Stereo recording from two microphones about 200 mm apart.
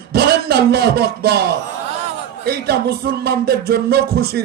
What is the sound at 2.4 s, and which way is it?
Music, 50° right (ahead or behind).